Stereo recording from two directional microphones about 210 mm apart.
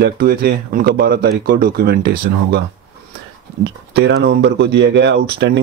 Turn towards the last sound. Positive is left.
turn(degrees=-55)  # may be behind; listen again after turning